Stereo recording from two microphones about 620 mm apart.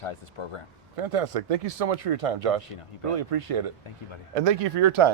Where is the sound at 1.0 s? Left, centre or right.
Right.